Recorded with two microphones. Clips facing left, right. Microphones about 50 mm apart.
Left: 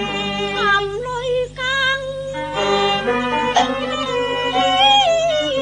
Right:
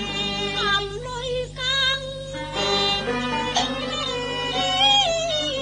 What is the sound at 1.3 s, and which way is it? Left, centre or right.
Music, left.